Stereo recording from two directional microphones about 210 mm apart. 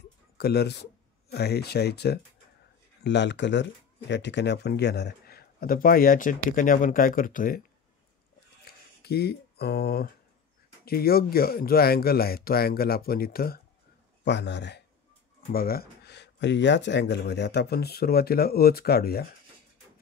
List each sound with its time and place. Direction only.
0.4 s speech: 50° left (ahead or behind)
8.6 s a sound: 50° left (ahead or behind)
10.9 s speech: 45° left (ahead or behind)
14.2 s speech: 55° left (ahead or behind)